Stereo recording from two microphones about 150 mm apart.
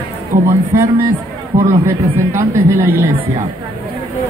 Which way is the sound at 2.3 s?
15° right (ahead or behind).